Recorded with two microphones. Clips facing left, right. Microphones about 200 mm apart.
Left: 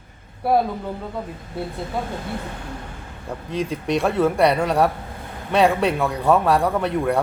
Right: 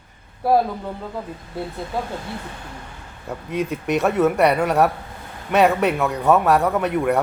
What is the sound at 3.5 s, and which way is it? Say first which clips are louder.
Speech: right 1 dB; 30° left (ahead or behind).